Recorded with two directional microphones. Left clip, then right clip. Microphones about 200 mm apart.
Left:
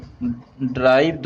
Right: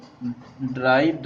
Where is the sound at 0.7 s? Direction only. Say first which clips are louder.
Left 4 dB; 50° left (ahead or behind).